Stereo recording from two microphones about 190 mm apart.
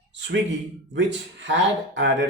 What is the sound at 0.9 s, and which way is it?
A man's voice, 70° right (ahead or behind).